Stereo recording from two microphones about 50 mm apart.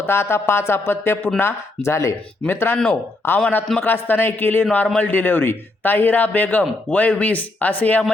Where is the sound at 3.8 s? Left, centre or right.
Left.